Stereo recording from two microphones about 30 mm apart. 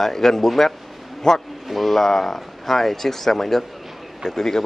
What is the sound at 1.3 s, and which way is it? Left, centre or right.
Speech, left.